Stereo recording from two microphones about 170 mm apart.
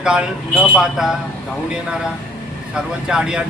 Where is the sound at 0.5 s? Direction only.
10° left (ahead or behind).